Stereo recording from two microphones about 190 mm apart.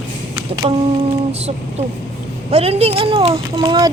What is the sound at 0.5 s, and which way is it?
A child's voice, 30° right (ahead or behind).